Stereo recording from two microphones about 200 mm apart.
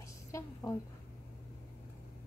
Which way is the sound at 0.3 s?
10° left (ahead or behind).